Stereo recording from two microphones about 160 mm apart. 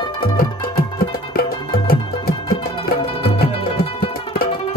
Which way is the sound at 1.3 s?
70° left (ahead or behind).